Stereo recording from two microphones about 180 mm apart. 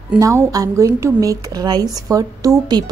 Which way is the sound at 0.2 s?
20° right (ahead or behind).